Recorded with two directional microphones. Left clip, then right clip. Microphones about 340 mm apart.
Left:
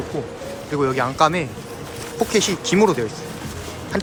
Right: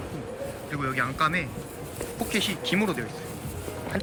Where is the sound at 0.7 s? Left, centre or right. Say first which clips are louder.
Left 8 dB; centre.